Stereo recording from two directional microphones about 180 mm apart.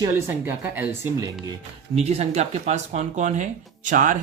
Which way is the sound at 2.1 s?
35° right (ahead or behind).